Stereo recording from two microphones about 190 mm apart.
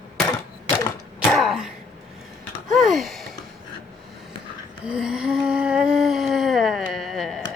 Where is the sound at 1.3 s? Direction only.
Centre (ahead or behind).